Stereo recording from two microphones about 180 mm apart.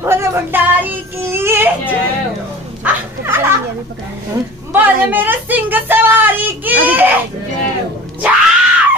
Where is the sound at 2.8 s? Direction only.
10° right (ahead or behind).